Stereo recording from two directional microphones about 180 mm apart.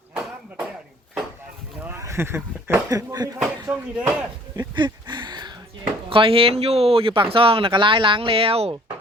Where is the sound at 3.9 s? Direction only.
5° right (ahead or behind).